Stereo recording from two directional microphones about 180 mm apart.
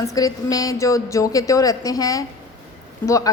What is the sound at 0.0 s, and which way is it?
A woman's voice, 20° left (ahead or behind).